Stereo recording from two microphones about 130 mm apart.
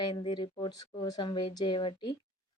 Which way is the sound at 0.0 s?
35° left (ahead or behind).